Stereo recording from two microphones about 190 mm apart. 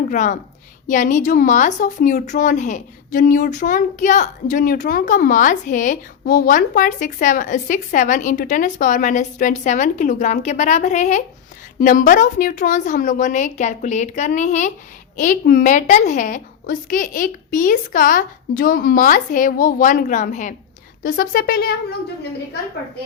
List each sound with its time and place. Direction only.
0.1 s a woman's voice: 40° left (ahead or behind)